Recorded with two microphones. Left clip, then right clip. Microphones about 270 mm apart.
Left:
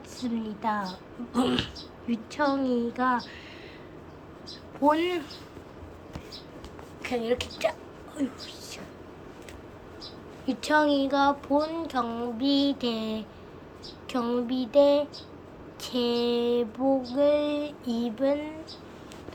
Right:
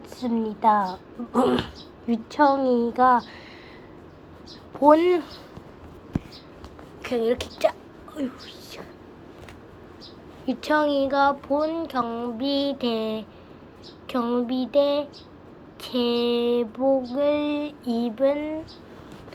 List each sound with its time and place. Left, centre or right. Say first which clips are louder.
0.2 s a woman's voice: right 8 dB; right
4.8 s a woman's voice: right 7 dB; centre
7.0 s a child's voice: right 4 dB; centre
10.4 s a woman's voice: right 2 dB; centre